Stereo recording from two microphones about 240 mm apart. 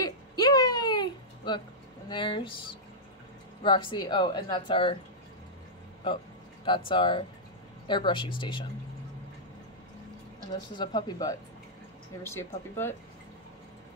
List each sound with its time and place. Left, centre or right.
0.0 s a sound: centre
2.0 s a woman's voice: centre
6.9 s a woman's voice: left
10.8 s speech: centre